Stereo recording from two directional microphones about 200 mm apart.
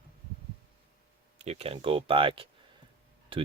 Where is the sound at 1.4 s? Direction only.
30° right (ahead or behind).